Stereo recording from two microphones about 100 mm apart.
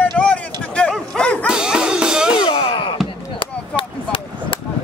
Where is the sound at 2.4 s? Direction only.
60° left (ahead or behind).